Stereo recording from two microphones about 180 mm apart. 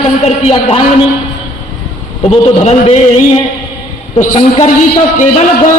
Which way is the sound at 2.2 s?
35° left (ahead or behind).